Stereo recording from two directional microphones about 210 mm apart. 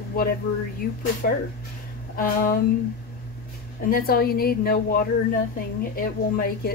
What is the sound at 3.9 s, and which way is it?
Speech, 45° left (ahead or behind).